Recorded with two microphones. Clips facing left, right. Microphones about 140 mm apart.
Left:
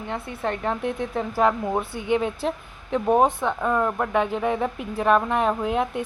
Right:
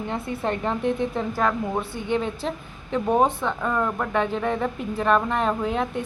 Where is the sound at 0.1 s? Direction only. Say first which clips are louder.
Even; centre (ahead or behind).